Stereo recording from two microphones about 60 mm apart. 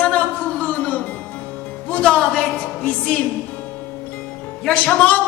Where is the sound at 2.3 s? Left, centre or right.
Left.